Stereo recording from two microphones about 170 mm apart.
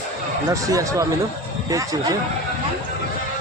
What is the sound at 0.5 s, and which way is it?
Speech, 20° right (ahead or behind).